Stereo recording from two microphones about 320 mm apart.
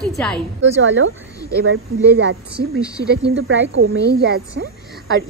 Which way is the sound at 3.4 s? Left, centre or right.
Right.